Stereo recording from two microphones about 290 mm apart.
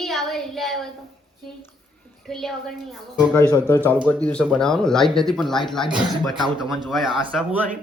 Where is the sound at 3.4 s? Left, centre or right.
Centre.